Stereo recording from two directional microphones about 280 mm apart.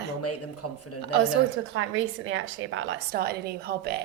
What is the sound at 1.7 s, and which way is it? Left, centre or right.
A woman's voice, right.